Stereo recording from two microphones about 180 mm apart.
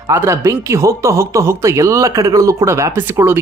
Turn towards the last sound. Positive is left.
turn(degrees=-15)  # may be behind; listen again after turning